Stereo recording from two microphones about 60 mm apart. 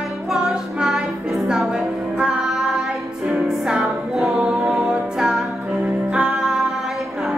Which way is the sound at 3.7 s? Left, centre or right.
Centre.